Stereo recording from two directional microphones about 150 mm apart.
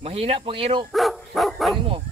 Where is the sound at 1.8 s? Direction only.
35° right (ahead or behind).